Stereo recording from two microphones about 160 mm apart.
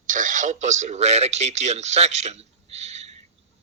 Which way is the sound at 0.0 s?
55° right (ahead or behind).